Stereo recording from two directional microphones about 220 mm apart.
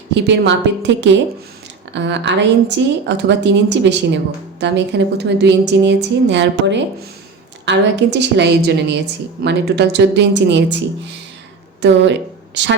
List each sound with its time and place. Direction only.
0.1 s speech: 50° right (ahead or behind)
11.8 s speech: 50° right (ahead or behind)